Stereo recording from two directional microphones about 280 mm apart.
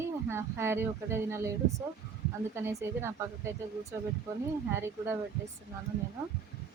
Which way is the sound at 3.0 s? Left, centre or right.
Centre.